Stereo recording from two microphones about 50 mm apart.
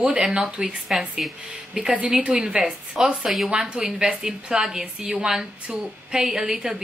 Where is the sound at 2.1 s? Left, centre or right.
Centre.